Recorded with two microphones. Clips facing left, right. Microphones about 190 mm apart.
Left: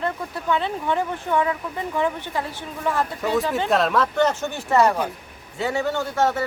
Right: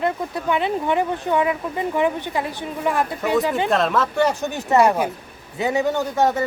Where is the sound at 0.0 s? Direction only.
15° right (ahead or behind).